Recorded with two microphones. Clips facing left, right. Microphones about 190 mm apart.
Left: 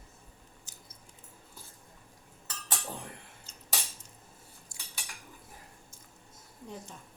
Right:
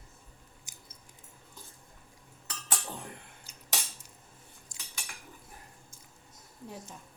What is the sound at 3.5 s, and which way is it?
Cutlery, 10° right (ahead or behind).